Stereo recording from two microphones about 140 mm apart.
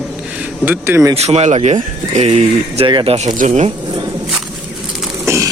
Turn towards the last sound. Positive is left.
turn(degrees=-20)  # may be behind; listen again after turning